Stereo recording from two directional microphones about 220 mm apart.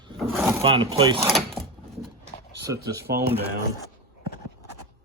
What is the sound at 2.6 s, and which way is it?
Speech, 15° right (ahead or behind).